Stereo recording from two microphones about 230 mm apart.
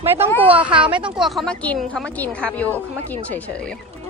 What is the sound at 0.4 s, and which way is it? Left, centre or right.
A woman's voice, centre.